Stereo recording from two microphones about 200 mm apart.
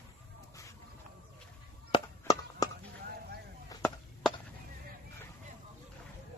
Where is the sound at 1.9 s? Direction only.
20° left (ahead or behind).